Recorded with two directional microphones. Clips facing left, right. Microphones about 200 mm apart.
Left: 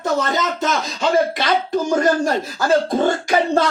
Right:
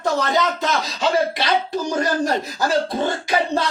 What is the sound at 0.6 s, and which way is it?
Speech, 50° left (ahead or behind).